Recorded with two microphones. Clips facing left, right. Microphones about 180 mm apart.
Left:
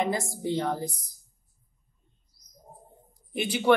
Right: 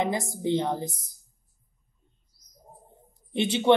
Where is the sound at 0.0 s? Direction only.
20° right (ahead or behind).